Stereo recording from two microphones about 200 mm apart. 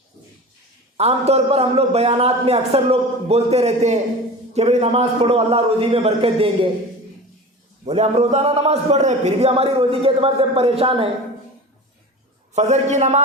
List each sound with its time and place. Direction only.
0.9 s a man's voice: 30° right (ahead or behind)
7.9 s a man's voice: 30° right (ahead or behind)
12.5 s a man's voice: 35° right (ahead or behind)